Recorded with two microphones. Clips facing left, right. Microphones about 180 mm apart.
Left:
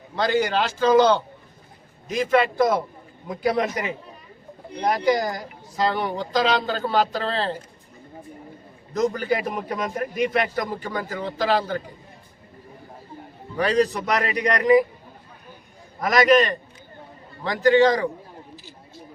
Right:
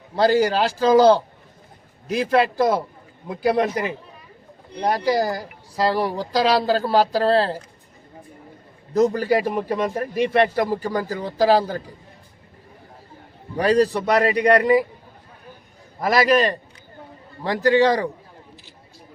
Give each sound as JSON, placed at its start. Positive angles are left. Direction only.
{"t": 0.2, "sound": "a man's voice", "side_deg": -35}
{"t": 4.8, "sound": "a man's voice", "side_deg": -30}
{"t": 8.9, "sound": "a man's voice", "side_deg": -35}
{"t": 13.6, "sound": "a man's voice", "side_deg": -35}
{"t": 16.0, "sound": "a man's voice", "side_deg": -30}